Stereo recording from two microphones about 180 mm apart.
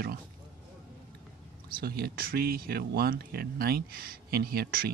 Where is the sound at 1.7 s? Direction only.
60° right (ahead or behind).